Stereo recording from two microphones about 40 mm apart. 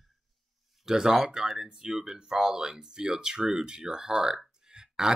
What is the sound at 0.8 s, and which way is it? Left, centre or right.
Speech, centre.